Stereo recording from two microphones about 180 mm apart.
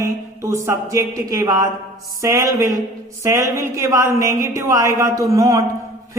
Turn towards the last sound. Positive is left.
turn(degrees=-15)  # may be behind; listen again after turning